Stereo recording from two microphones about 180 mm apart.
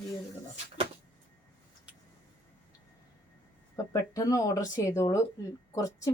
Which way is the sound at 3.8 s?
20° left (ahead or behind).